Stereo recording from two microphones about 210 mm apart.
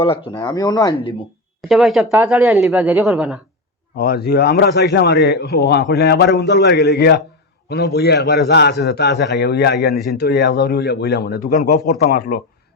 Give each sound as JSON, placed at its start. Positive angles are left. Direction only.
{"t": 0.3, "sound": "speech", "side_deg": 20}
{"t": 1.6, "sound": "speech", "side_deg": 0}
{"t": 3.9, "sound": "a man's voice", "side_deg": 50}
{"t": 9.9, "sound": "speech", "side_deg": 0}
{"t": 10.2, "sound": "a man's voice", "side_deg": 50}